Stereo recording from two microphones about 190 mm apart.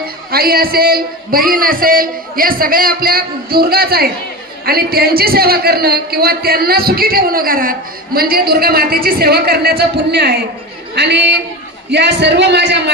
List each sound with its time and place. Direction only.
0.0 s a man's voice: 55° right (ahead or behind)